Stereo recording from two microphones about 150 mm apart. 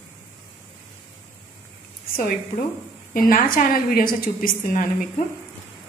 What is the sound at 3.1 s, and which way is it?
A woman's voice, 70° left (ahead or behind).